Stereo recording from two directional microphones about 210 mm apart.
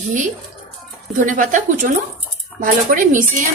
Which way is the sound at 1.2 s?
40° right (ahead or behind).